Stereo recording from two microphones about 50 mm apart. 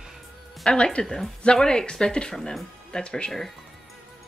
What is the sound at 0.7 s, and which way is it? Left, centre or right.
Speech, centre.